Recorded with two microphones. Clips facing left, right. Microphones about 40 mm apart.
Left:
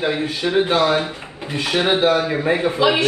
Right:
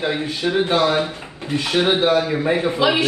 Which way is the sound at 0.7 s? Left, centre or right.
Left.